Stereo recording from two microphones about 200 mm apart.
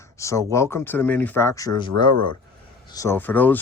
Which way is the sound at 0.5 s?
10° left (ahead or behind).